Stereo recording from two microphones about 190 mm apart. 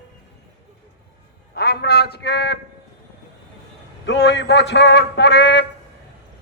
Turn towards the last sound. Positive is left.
turn(degrees=65)  # may be behind; listen again after turning